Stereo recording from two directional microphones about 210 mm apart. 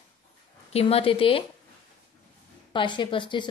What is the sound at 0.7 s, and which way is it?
Speech, 25° left (ahead or behind).